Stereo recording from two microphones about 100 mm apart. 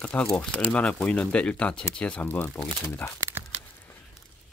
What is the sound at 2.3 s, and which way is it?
Speech, 25° left (ahead or behind).